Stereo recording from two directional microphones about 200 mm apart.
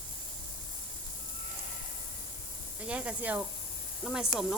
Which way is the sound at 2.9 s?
5° right (ahead or behind).